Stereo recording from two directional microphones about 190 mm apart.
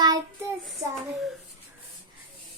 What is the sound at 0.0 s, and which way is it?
Child singing, 20° right (ahead or behind).